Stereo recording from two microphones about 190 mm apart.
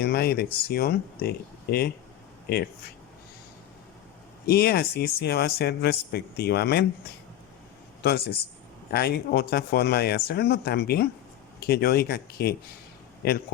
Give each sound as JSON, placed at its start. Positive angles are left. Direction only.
{"t": 0.0, "sound": "speech", "side_deg": 55}
{"t": 4.4, "sound": "speech", "side_deg": 55}
{"t": 8.0, "sound": "speech", "side_deg": 55}